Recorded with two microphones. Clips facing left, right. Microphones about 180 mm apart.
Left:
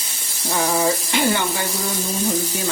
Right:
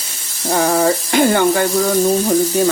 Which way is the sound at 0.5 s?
50° right (ahead or behind).